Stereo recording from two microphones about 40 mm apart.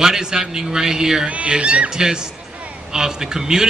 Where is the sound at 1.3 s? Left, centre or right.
Right.